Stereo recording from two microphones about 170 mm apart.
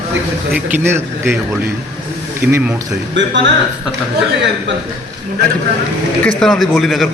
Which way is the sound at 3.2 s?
90° right.